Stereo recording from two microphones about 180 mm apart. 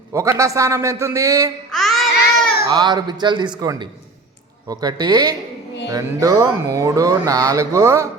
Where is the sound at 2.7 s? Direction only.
25° right (ahead or behind).